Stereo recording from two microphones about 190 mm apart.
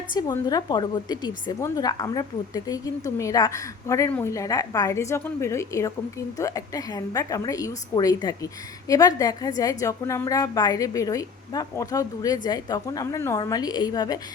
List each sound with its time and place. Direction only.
0.1 s a woman's voice: 20° left (ahead or behind)